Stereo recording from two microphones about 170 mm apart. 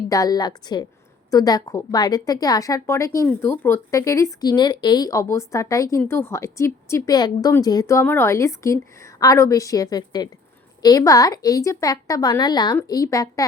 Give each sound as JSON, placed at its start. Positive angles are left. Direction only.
{"t": 0.1, "sound": "speech", "side_deg": 20}